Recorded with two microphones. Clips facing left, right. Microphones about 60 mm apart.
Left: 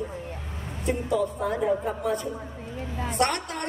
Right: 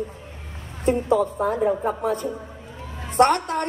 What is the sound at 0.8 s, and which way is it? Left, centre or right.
A woman's voice, right.